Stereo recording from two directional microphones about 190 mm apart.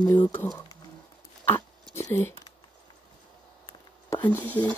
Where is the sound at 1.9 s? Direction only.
15° left (ahead or behind).